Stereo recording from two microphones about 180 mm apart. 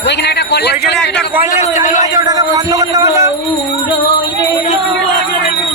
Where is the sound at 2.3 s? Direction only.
20° right (ahead or behind).